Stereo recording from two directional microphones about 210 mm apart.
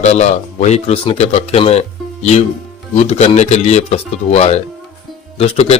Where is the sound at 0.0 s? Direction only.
30° left (ahead or behind).